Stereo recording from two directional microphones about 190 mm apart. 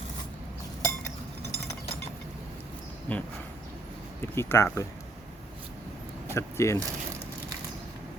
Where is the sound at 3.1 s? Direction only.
10° left (ahead or behind).